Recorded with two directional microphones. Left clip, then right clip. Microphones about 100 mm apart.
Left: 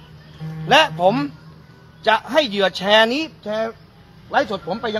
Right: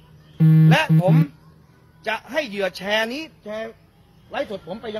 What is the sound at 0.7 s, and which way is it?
A man's voice, 15° right (ahead or behind).